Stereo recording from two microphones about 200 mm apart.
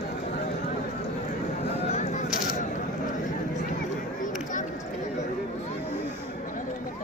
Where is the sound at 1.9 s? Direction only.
30° left (ahead or behind).